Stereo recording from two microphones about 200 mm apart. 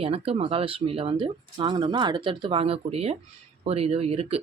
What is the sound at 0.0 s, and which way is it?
Speech, 30° right (ahead or behind).